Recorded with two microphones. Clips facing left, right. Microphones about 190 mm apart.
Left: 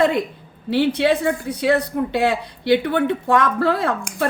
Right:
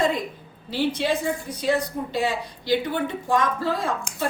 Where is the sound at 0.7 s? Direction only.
65° left (ahead or behind).